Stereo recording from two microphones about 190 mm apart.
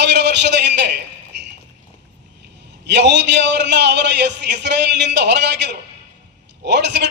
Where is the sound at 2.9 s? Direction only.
65° right (ahead or behind).